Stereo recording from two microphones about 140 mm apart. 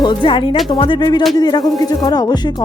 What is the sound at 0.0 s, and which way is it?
A woman's voice, 35° left (ahead or behind).